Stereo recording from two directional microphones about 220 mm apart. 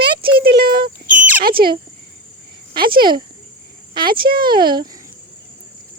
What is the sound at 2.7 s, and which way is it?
Speech, 45° right (ahead or behind).